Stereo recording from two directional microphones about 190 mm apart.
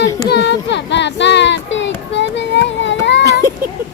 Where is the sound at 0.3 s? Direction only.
65° left (ahead or behind).